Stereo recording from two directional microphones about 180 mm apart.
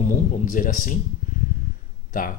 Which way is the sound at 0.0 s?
45° left (ahead or behind).